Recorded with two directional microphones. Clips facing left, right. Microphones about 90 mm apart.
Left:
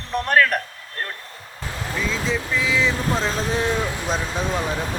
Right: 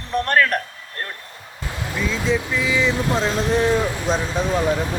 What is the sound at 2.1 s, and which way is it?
A man's voice, centre (ahead or behind).